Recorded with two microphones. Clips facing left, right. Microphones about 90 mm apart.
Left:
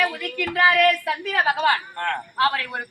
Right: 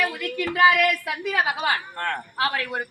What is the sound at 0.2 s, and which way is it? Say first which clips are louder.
A woman's voice: right 1 dB; 20° right (ahead or behind).